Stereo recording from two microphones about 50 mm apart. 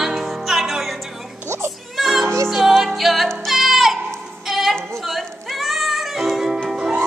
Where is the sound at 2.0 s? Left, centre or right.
Centre.